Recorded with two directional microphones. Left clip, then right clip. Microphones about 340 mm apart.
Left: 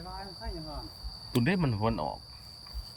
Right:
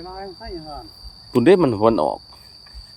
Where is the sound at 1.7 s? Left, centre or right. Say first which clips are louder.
Right 15 dB; right.